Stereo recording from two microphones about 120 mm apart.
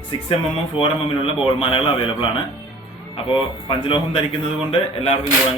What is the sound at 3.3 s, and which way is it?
Speech, 45° left (ahead or behind).